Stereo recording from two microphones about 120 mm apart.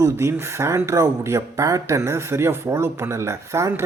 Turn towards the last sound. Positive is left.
turn(degrees=-25)  # may be behind; listen again after turning